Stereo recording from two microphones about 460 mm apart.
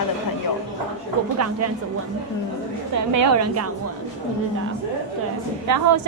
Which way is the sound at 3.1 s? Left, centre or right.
Right.